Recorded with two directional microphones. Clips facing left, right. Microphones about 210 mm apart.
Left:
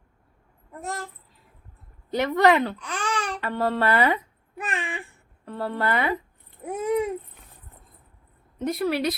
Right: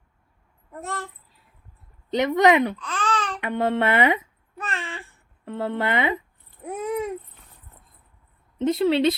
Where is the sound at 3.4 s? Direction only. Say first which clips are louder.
Right 2 dB; 20° right (ahead or behind).